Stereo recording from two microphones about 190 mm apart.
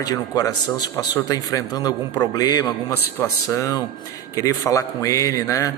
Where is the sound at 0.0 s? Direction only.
20° left (ahead or behind).